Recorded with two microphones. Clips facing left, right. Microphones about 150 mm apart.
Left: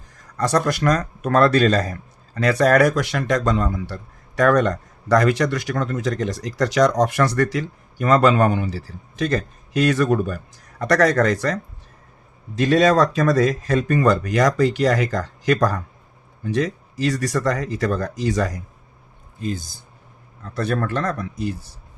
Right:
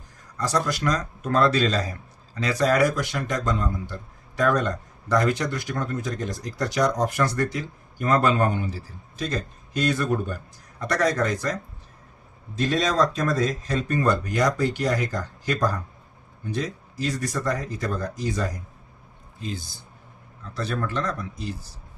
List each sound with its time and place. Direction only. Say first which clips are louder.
0.3 s speech: left 5 dB; 65° left (ahead or behind); by 11.5 s 85° left
12.5 s speech: left 7 dB; 85° left
19.4 s a man's voice: left 6 dB; 50° left (ahead or behind)